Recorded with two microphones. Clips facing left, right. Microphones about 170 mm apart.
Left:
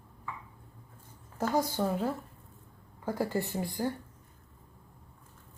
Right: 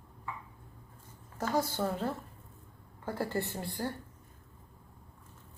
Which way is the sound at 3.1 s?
10° left (ahead or behind).